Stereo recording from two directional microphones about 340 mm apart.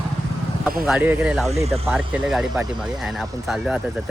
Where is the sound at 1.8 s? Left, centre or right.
Centre.